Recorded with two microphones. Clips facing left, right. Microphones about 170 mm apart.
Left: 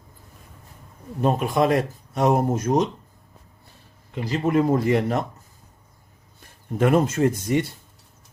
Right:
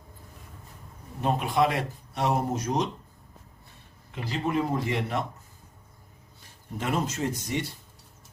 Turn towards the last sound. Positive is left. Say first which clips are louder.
# left 9 dB
turn(degrees=50)  # may be behind; listen again after turning